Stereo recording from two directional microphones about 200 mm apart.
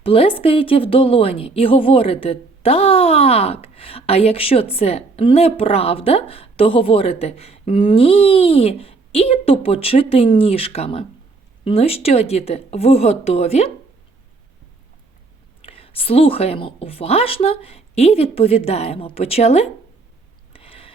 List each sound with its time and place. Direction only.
0.0 s a woman's voice: 30° left (ahead or behind)
15.6 s a woman's voice: 30° left (ahead or behind)
20.5 s a sound: 30° left (ahead or behind)